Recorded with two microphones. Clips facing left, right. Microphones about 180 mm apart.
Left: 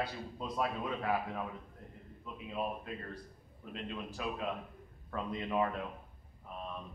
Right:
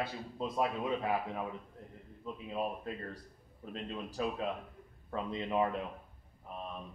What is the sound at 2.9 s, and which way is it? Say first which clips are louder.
Speech: right 2 dB; 35° right (ahead or behind).